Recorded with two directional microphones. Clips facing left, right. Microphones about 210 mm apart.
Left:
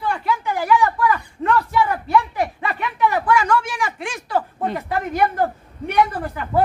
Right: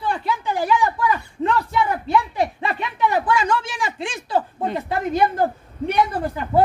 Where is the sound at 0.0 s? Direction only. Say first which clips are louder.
Left 1 dB; 25° right (ahead or behind).